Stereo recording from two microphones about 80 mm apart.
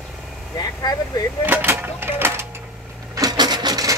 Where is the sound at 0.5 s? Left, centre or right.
Left.